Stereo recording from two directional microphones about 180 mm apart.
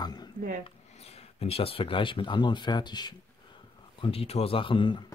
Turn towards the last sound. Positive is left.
turn(degrees=25)  # may be behind; listen again after turning